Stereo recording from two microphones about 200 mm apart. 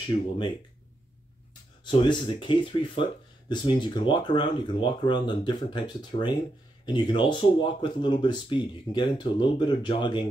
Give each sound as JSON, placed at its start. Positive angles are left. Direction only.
{"t": 1.9, "sound": "speech", "side_deg": 25}